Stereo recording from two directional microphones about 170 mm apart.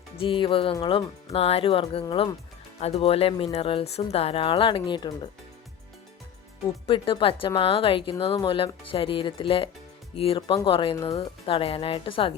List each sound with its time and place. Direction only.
0.2 s speech: 30° left (ahead or behind)
6.8 s speech: 30° left (ahead or behind)